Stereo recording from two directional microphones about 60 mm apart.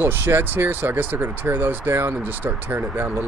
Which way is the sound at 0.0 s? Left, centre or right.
Right.